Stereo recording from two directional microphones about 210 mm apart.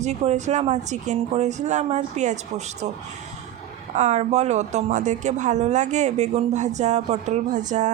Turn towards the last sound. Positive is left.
turn(degrees=-35)  # may be behind; listen again after turning